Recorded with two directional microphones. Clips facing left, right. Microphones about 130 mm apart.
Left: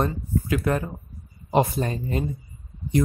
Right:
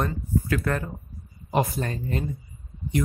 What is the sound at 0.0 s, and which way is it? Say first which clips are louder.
Speech: left 2 dB; 20° left (ahead or behind).